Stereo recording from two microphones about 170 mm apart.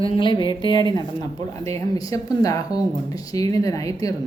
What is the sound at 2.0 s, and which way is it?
Speech, 20° left (ahead or behind).